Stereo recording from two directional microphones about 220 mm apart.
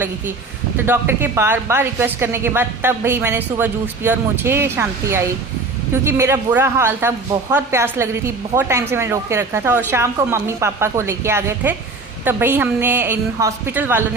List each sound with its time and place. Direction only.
0.8 s a woman's voice: 10° right (ahead or behind)